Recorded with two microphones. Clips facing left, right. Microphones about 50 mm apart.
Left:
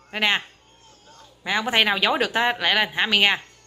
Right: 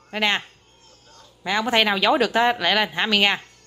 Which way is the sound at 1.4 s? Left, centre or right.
Centre.